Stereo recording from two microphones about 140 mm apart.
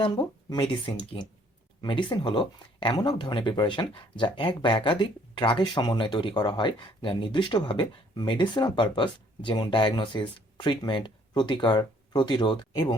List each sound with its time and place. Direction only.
0.0 s speech: 35° left (ahead or behind)